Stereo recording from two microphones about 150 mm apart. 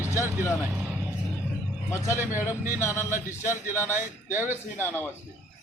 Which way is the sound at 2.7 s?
20° left (ahead or behind).